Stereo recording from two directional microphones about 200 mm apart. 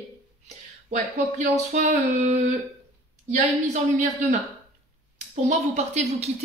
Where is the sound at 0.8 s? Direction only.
35° right (ahead or behind).